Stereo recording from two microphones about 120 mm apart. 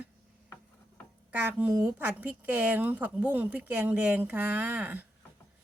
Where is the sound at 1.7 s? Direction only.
20° right (ahead or behind).